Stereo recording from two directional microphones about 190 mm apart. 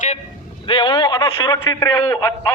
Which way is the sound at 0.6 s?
25° left (ahead or behind).